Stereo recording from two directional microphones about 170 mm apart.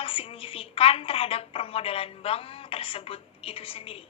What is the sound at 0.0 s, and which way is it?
A woman's voice, 35° left (ahead or behind).